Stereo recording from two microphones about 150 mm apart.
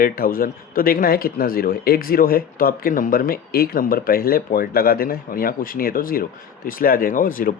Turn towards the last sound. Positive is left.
turn(degrees=65)  # may be behind; listen again after turning